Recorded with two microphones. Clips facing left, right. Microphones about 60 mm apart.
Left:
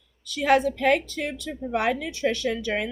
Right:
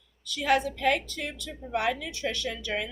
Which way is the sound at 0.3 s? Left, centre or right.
Left.